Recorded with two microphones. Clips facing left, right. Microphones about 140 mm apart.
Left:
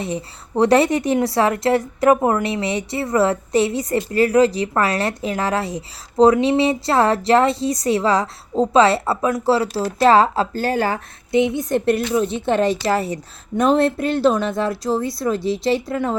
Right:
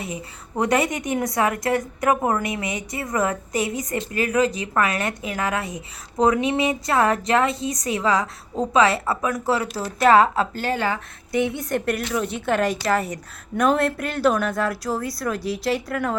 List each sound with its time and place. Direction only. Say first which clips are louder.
0.0 s a woman's voice: left 6 dB; 30° left (ahead or behind)
11.3 s a woman's voice: left 5 dB; 20° left (ahead or behind)